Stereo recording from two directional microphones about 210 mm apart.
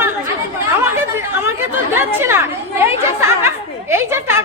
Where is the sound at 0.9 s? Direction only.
10° right (ahead or behind).